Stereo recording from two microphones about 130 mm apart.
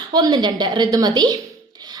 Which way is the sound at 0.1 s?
30° right (ahead or behind).